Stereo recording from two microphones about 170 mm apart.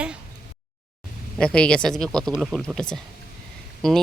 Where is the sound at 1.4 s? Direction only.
5° left (ahead or behind).